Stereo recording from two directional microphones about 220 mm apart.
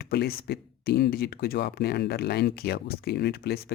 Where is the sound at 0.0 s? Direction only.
45° left (ahead or behind).